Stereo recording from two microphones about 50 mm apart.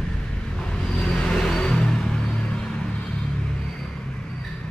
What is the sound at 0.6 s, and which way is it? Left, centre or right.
Vehicle, centre.